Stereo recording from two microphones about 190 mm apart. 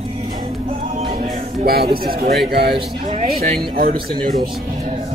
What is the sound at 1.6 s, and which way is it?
Speech, 55° right (ahead or behind).